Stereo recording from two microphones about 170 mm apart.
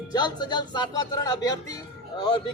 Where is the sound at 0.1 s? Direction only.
25° left (ahead or behind).